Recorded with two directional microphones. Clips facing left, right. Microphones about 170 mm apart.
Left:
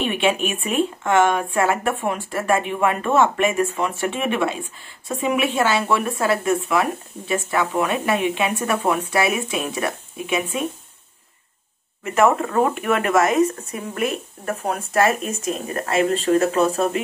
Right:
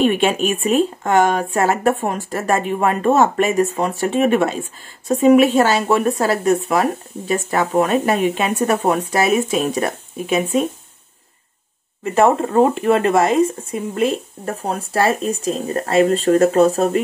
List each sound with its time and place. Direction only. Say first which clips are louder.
0.0 s speech: right 5 dB; 45° right (ahead or behind)
12.0 s speech: right 3 dB; 30° right (ahead or behind)